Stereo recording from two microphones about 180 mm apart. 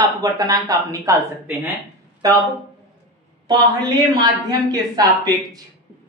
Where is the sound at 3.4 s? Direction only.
20° right (ahead or behind).